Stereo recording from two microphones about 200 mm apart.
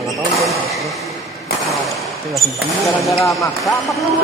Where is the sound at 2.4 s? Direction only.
Centre (ahead or behind).